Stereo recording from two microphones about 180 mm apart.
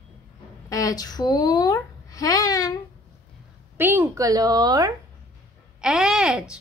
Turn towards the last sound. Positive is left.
turn(degrees=-5)  # may be behind; listen again after turning